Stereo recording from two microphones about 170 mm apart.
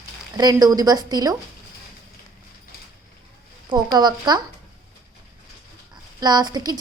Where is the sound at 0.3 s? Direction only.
25° right (ahead or behind).